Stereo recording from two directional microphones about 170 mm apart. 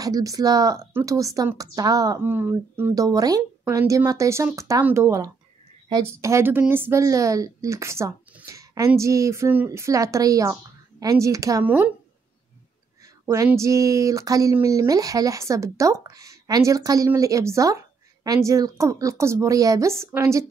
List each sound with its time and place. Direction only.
0.0 s a woman's voice: 20° right (ahead or behind)
13.5 s speech: 20° right (ahead or behind)